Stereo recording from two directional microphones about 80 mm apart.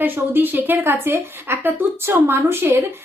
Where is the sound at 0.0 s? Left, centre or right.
Right.